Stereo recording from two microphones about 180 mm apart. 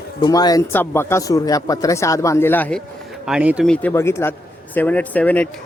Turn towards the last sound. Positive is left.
turn(degrees=5)  # may be behind; listen again after turning